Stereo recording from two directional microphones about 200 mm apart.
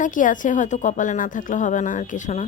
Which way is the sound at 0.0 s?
40° left (ahead or behind).